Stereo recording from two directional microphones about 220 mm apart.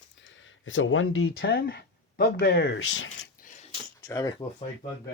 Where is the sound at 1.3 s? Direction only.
45° left (ahead or behind).